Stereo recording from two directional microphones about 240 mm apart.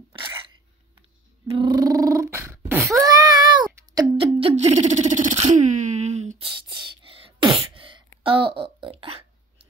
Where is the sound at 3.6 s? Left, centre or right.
Centre.